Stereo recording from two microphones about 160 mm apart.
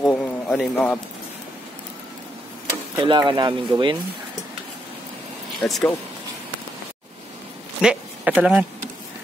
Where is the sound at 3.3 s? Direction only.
30° right (ahead or behind).